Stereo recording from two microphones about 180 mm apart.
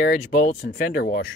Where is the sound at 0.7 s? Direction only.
55° left (ahead or behind).